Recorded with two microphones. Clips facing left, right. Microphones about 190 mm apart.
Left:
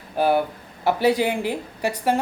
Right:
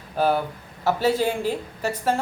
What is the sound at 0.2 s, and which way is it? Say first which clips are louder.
Speech: left 2 dB; 15° left (ahead or behind).